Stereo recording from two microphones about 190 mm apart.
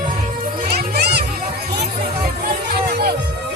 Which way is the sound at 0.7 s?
55° right (ahead or behind).